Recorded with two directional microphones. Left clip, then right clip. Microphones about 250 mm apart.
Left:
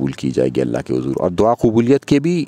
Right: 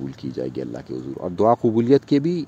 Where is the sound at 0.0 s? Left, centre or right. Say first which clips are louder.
Left 11 dB; left.